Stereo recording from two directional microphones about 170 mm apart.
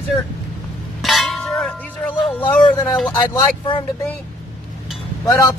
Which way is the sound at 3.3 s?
30° left (ahead or behind).